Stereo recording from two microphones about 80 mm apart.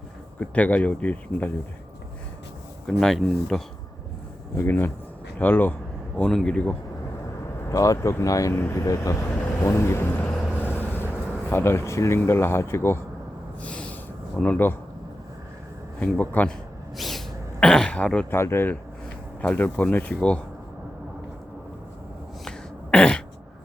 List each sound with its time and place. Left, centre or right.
0.3 s speech: centre
2.8 s speech: centre
4.5 s speech: left
6.1 s speech: centre
7.7 s speech: left
13.6 s snort: centre
14.3 s speech: centre
16.0 s speech: left
17.0 s a sound: centre
18.3 s speech: left
22.4 s throat clearing: centre